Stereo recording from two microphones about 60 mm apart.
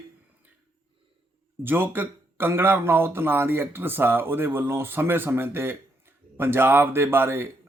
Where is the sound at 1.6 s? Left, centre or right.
Right.